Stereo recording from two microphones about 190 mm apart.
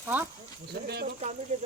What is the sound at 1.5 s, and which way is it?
Speech, 40° right (ahead or behind).